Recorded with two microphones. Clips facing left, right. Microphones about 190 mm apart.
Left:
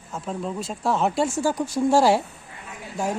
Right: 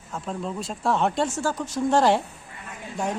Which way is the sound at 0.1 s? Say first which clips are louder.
Left 1 dB; 5° left (ahead or behind).